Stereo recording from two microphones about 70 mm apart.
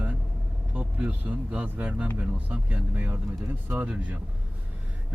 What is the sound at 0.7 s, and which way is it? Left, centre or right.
A man's voice, centre.